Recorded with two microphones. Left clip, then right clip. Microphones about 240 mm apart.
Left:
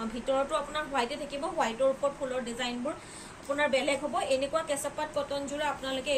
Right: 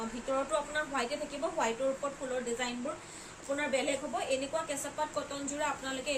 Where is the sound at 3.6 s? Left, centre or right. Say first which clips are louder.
Left 5 dB; centre.